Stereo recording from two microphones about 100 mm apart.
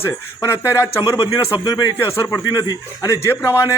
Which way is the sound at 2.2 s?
30° left (ahead or behind).